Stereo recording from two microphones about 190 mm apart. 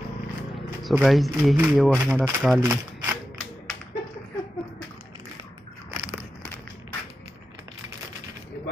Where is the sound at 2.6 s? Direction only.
10° right (ahead or behind).